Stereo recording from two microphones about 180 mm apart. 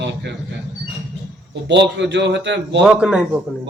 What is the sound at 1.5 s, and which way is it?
A man's voice, 75° right (ahead or behind).